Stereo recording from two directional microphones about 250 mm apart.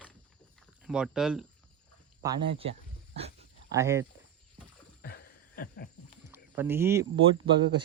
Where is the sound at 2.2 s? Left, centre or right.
Centre.